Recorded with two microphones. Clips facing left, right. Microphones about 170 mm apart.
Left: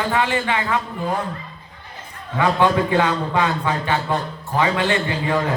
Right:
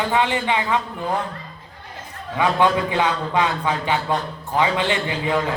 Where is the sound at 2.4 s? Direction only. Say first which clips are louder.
Left 1 dB; 15° right (ahead or behind).